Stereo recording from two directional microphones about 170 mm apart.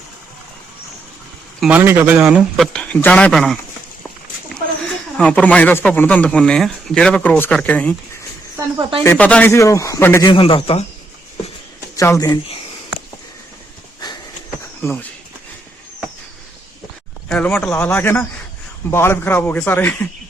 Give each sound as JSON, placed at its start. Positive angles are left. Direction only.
{"t": 1.6, "sound": "a man's voice", "side_deg": -10}
{"t": 4.8, "sound": "speech", "side_deg": 5}
{"t": 9.0, "sound": "speech", "side_deg": 10}
{"t": 10.3, "sound": "speech", "side_deg": 30}
{"t": 11.9, "sound": "speech", "side_deg": 20}
{"t": 14.8, "sound": "speech", "side_deg": 10}
{"t": 17.2, "sound": "speech", "side_deg": 5}